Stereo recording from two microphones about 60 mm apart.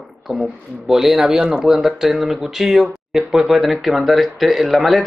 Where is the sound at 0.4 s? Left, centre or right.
Centre.